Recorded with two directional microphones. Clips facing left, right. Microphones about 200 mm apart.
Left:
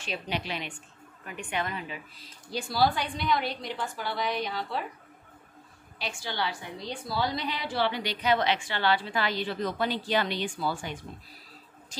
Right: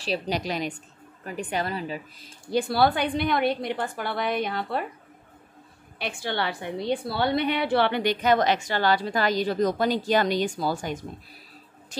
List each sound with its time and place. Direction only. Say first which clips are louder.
0.0 s a woman's voice: right 6 dB; 35° right (ahead or behind)
2.5 s a woman's voice: right 5 dB; 60° right (ahead or behind)
5.9 s a woman's voice: right 5 dB; 55° right (ahead or behind)